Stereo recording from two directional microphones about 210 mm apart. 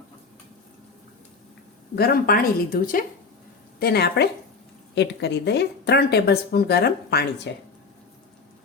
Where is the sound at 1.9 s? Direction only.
45° left (ahead or behind).